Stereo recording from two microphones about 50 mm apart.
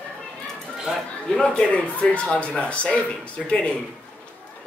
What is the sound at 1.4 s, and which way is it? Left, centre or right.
A man's voice, centre.